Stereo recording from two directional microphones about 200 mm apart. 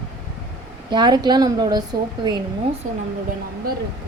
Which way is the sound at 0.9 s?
20° right (ahead or behind).